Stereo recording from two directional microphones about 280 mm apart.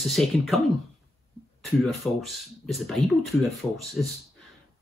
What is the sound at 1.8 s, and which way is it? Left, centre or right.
Speech, centre.